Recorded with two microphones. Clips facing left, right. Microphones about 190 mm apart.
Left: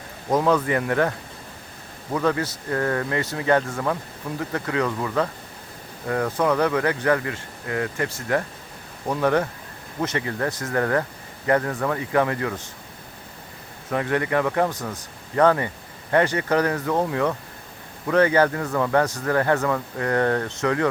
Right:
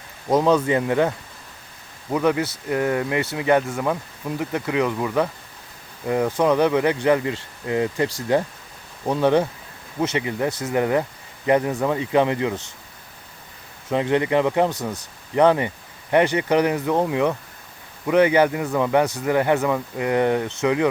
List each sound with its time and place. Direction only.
0.3 s speech: 20° right (ahead or behind)
2.1 s speech: 15° right (ahead or behind)
13.9 s speech: 20° right (ahead or behind)